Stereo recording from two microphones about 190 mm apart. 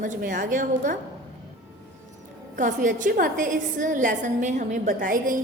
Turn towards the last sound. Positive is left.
turn(degrees=-45)  # may be behind; listen again after turning